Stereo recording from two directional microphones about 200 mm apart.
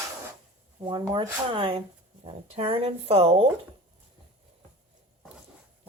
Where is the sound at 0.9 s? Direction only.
20° right (ahead or behind).